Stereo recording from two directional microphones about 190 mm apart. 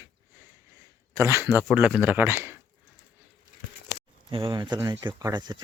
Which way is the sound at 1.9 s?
10° right (ahead or behind).